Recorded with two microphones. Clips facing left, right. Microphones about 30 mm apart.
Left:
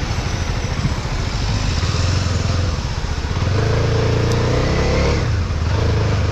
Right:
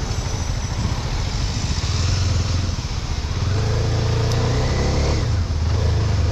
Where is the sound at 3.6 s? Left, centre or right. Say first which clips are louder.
Left 6 dB; left.